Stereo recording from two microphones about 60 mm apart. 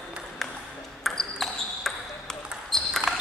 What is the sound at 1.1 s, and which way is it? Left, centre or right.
Basketball bounce, centre.